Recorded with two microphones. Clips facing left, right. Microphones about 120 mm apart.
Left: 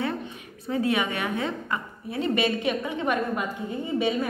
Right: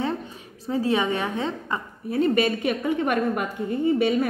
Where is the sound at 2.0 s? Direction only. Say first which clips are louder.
Right 4 dB; 45° right (ahead or behind).